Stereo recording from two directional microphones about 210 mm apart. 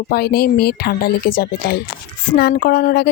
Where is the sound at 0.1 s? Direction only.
50° left (ahead or behind).